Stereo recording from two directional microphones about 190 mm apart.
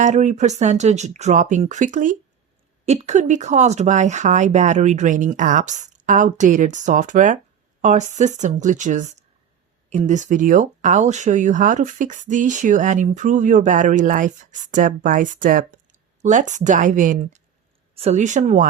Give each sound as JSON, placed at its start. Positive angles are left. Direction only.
{"t": 0.0, "sound": "speech", "side_deg": -40}